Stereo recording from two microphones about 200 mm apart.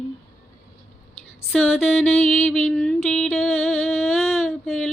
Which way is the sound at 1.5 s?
5° left (ahead or behind).